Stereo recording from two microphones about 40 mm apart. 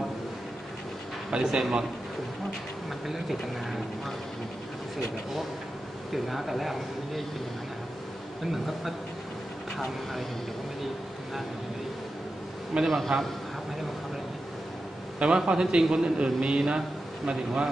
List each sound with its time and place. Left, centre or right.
1.3 s speech: centre
3.1 s speech: centre
6.1 s speech: centre
8.5 s speech: centre
12.8 s speech: centre
15.1 s a man's voice: right